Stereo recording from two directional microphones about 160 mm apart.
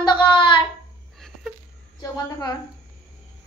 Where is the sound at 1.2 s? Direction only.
Centre (ahead or behind).